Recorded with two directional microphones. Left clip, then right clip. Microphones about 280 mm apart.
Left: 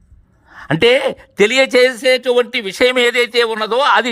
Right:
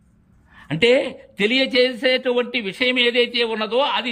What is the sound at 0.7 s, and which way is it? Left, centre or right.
Speech, centre.